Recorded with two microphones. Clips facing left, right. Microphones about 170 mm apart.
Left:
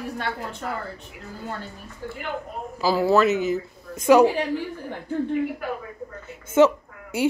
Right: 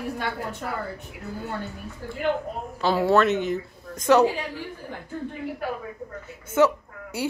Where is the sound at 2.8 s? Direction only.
Centre (ahead or behind).